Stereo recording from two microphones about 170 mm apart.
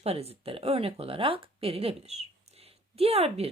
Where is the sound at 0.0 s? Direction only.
35° right (ahead or behind).